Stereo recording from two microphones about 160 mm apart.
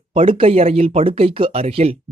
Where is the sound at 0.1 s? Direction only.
35° right (ahead or behind).